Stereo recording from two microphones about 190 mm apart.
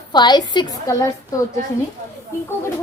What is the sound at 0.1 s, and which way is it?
Speech, 25° left (ahead or behind).